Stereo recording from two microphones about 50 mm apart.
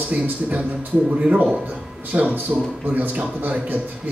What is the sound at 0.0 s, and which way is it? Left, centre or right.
A man's voice, right.